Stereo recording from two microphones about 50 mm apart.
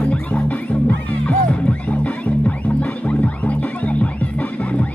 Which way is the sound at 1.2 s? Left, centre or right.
Left.